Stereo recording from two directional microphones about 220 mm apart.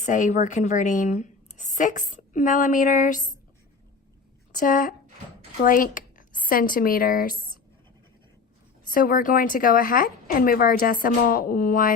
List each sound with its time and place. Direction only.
0.0 s a woman's voice: 35° left (ahead or behind)
4.5 s speech: 35° left (ahead or behind)
8.9 s speech: 40° left (ahead or behind)